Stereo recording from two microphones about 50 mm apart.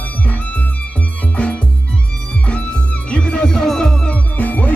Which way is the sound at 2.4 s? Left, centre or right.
Left.